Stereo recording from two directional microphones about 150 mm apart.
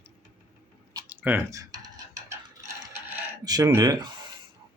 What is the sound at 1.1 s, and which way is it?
Speech, 10° right (ahead or behind).